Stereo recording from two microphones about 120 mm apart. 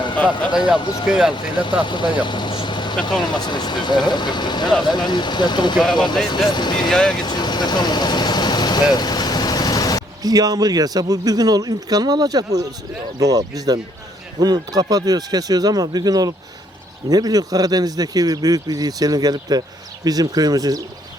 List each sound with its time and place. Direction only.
0.5 s speech: 5° right (ahead or behind)
1.8 s speech: 40° left (ahead or behind)
6.9 s speech: 5° left (ahead or behind)
7.2 s vehicle: 35° left (ahead or behind)
10.2 s speech: 30° right (ahead or behind)